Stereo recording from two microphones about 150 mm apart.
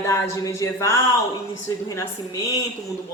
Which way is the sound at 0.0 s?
20° left (ahead or behind).